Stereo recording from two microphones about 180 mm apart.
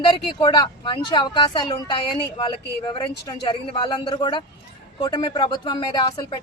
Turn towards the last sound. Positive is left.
turn(degrees=25)  # may be behind; listen again after turning